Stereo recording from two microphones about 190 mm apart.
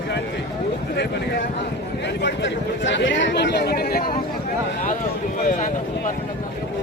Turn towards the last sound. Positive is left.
turn(degrees=45)  # may be behind; listen again after turning